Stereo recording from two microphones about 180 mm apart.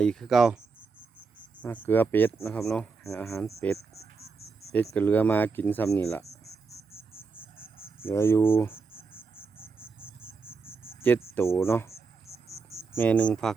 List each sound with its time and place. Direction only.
0.0 s speech: 5° left (ahead or behind)
1.6 s speech: 10° left (ahead or behind)
3.0 s speech: 15° left (ahead or behind)
3.8 s a sound: 35° left (ahead or behind)
4.7 s speech: 10° left (ahead or behind)
6.5 s insect: 35° left (ahead or behind)
7.1 s cricket: 10° left (ahead or behind)
10.2 s insect: 10° left (ahead or behind)
11.0 s speech: 10° left (ahead or behind)
12.5 s cricket: 15° left (ahead or behind)
12.9 s speech: 10° left (ahead or behind)